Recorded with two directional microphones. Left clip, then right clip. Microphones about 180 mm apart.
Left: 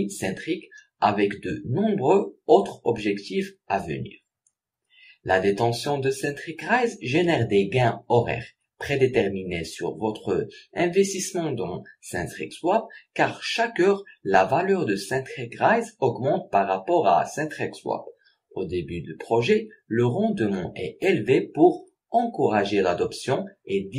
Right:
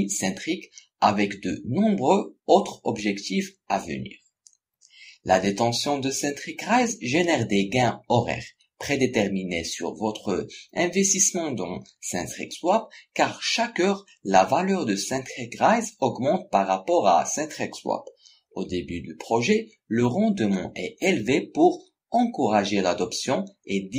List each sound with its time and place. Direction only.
0.0 s speech: 35° right (ahead or behind)
5.2 s speech: 35° right (ahead or behind)